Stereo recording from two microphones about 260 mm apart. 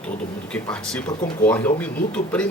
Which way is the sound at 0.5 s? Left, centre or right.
Centre.